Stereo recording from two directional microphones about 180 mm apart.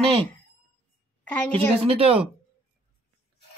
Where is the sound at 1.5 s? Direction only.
30° right (ahead or behind).